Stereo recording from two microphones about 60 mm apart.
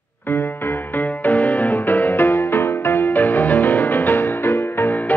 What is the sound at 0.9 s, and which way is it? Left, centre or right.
Music, left.